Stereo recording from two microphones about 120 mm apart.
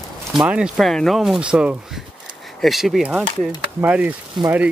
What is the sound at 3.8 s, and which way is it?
Speech, 10° right (ahead or behind).